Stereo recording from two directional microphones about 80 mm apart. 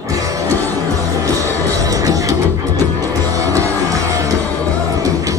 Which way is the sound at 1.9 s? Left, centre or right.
Right.